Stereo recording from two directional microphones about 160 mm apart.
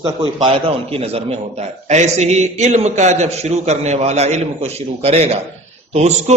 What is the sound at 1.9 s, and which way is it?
A man's voice, 45° right (ahead or behind).